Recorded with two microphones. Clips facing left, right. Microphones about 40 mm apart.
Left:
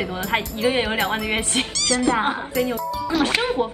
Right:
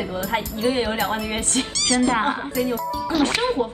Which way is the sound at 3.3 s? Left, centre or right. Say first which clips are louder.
Even; left.